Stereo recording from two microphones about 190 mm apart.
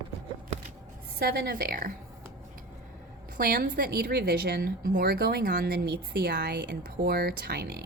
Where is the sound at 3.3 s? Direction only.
50° right (ahead or behind).